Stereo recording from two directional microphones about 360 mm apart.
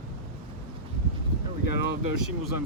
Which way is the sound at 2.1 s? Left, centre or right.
Left.